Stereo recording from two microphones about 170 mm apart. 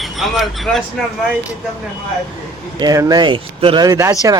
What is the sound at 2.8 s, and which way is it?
Speech, 20° right (ahead or behind).